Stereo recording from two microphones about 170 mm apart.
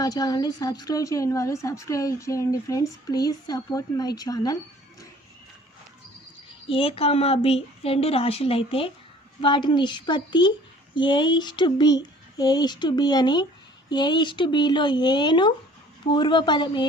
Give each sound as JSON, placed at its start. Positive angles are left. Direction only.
{"t": 0.0, "sound": "speech", "side_deg": 20}
{"t": 6.7, "sound": "speech", "side_deg": 35}